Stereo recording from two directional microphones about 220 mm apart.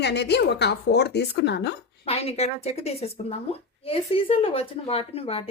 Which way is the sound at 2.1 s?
30° left (ahead or behind).